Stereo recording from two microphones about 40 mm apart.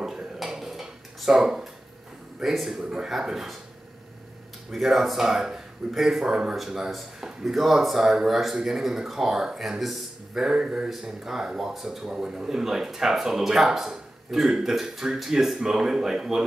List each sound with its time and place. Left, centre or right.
0.0 s dishes: centre
2.4 s speech: centre
2.8 s speech: centre
3.1 s speech: centre
4.7 s speech: centre
10.5 s speech: right
10.9 s speech: centre
12.0 s speech: centre